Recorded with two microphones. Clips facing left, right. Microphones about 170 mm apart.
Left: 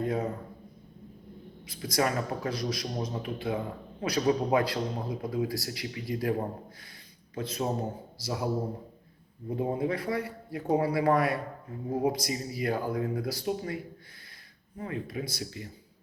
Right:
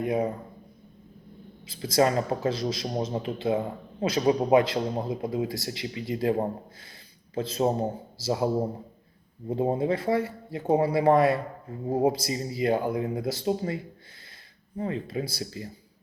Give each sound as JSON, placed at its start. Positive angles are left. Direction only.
{"t": 0.0, "sound": "speech", "side_deg": -15}
{"t": 1.6, "sound": "a man's voice", "side_deg": -25}
{"t": 7.3, "sound": "a man's voice", "side_deg": -30}
{"t": 9.5, "sound": "a man's voice", "side_deg": -25}
{"t": 14.8, "sound": "a man's voice", "side_deg": -25}